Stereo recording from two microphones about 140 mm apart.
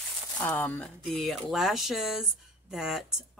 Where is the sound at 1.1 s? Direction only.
Centre (ahead or behind).